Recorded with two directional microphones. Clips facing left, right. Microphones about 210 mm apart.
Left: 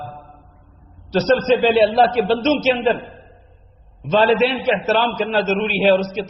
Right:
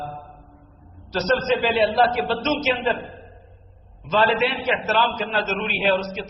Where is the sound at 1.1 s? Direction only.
30° left (ahead or behind).